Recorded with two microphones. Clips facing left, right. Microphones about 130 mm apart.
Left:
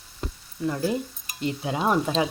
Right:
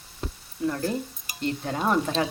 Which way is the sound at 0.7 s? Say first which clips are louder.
Left 2 dB; 5° left (ahead or behind).